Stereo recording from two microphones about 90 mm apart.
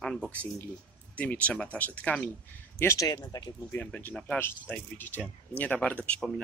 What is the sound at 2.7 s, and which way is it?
Speech, 30° left (ahead or behind).